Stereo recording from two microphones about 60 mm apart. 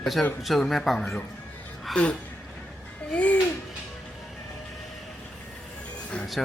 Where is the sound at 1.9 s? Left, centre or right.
Centre.